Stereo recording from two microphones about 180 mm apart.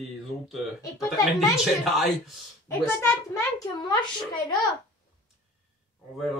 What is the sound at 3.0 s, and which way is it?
A child's voice, 20° left (ahead or behind).